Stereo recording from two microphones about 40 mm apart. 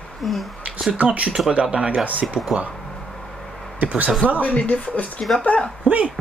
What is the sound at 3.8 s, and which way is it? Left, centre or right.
Speech, right.